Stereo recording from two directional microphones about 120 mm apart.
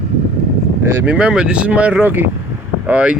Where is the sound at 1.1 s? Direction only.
5° right (ahead or behind).